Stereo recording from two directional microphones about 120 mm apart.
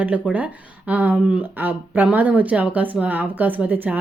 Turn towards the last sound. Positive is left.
turn(degrees=-15)  # may be behind; listen again after turning